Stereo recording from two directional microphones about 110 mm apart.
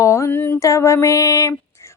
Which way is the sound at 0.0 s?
25° left (ahead or behind).